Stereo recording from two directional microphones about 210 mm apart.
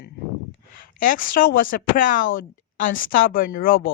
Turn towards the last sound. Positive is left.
turn(degrees=45)  # may be behind; listen again after turning